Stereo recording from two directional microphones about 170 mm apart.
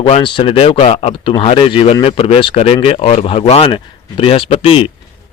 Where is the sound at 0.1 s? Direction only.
30° left (ahead or behind).